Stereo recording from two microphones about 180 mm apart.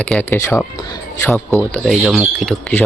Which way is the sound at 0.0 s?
5° left (ahead or behind).